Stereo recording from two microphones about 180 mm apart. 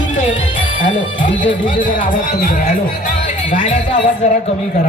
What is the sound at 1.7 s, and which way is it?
A man's voice, 50° left (ahead or behind).